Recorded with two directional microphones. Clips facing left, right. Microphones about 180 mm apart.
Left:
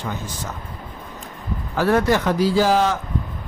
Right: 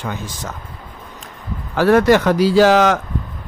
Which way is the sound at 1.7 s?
80° right.